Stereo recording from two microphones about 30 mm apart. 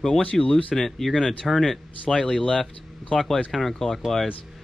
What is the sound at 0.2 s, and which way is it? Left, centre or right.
Speech, left.